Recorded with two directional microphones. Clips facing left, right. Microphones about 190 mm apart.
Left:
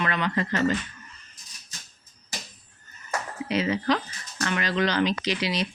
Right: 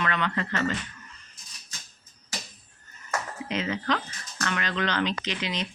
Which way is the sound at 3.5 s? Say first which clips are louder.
Left 4 dB; 10° left (ahead or behind).